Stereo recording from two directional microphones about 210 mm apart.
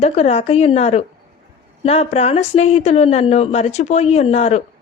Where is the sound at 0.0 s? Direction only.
30° left (ahead or behind).